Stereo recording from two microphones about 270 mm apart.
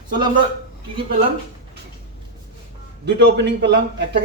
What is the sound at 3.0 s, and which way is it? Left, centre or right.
Speech, right.